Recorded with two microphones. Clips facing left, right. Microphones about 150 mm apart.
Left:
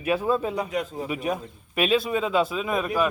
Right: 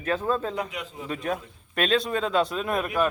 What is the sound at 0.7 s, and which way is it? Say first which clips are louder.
Speech: left 8 dB; 40° left (ahead or behind).